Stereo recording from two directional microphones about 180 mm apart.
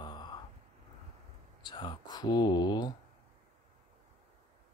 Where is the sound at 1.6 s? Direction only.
25° left (ahead or behind).